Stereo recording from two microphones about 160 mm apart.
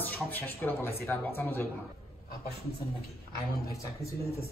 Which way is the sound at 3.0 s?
70° left (ahead or behind).